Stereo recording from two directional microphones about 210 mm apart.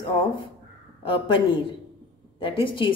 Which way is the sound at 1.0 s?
25° left (ahead or behind).